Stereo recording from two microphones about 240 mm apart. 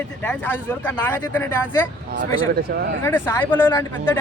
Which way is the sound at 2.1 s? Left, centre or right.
Right.